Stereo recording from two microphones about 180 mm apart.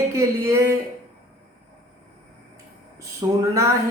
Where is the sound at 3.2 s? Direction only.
15° right (ahead or behind).